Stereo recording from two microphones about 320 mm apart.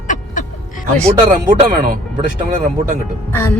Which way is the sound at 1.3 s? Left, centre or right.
Right.